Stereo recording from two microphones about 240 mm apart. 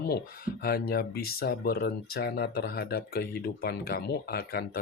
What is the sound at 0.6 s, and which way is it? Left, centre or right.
Speech, left.